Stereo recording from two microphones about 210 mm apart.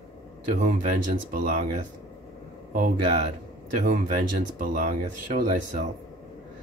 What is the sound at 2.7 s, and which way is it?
Speech, 40° right (ahead or behind).